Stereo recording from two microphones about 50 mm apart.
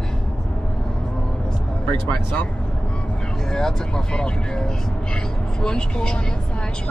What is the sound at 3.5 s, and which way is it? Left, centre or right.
Speech, centre.